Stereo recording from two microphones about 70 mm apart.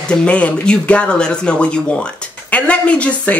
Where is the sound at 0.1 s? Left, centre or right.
Centre.